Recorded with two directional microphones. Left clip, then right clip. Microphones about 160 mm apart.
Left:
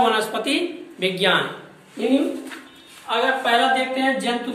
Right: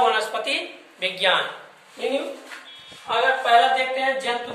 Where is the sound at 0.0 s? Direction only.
5° right (ahead or behind).